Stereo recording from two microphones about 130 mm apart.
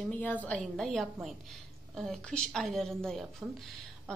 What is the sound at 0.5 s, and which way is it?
Speech, centre (ahead or behind).